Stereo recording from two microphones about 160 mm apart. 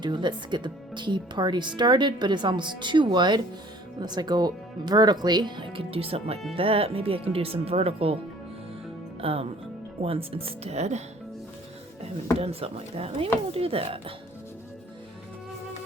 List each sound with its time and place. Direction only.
0.0 s speech: 30° right (ahead or behind)
9.2 s speech: 35° right (ahead or behind)
12.4 s speech: 40° right (ahead or behind)